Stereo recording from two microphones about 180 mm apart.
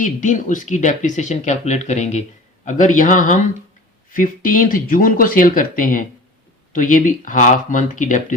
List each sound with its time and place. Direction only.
0.0 s speech: 45° left (ahead or behind)